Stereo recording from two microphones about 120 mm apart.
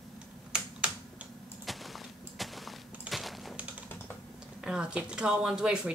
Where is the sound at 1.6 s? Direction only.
Centre (ahead or behind).